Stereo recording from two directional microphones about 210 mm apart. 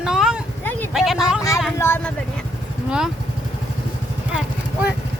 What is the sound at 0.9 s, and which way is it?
Speech, centre (ahead or behind).